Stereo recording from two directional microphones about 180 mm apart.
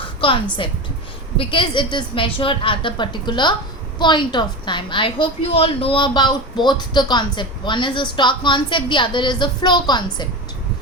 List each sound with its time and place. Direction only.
0.2 s a woman's voice: 30° left (ahead or behind)